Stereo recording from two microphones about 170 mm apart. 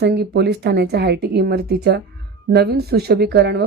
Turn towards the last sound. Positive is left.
turn(degrees=-80)